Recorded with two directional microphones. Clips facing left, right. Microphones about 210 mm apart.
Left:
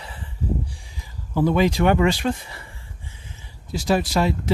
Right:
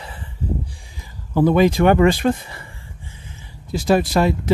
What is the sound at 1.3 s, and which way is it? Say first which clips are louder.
Speech: right 4 dB; 50° right (ahead or behind).